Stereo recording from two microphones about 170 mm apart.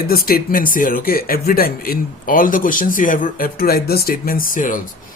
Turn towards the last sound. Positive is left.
turn(degrees=50)  # may be behind; listen again after turning